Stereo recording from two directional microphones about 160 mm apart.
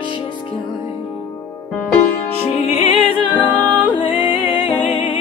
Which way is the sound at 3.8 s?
30° left (ahead or behind).